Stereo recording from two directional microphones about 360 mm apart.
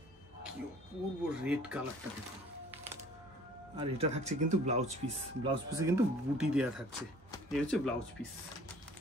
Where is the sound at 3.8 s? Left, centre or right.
Centre.